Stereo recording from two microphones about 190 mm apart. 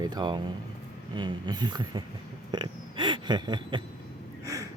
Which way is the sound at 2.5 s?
25° right (ahead or behind).